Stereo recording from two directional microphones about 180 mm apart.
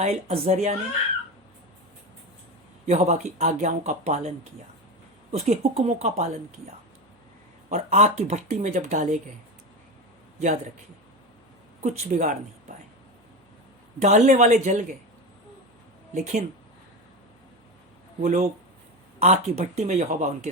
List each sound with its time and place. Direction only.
0.0 s speech: 35° right (ahead or behind)
2.8 s speech: 40° right (ahead or behind)
7.7 s speech: 40° right (ahead or behind)
11.8 s speech: 40° right (ahead or behind)
14.0 s speech: 40° right (ahead or behind)
16.1 s speech: 40° right (ahead or behind)
18.2 s speech: 40° right (ahead or behind)